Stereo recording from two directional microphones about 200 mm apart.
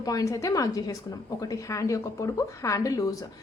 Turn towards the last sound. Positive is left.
turn(degrees=15)  # may be behind; listen again after turning